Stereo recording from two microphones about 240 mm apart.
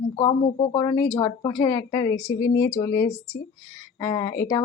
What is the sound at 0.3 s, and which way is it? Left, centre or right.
Speech, centre.